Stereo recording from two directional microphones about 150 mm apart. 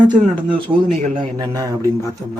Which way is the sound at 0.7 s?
35° right (ahead or behind).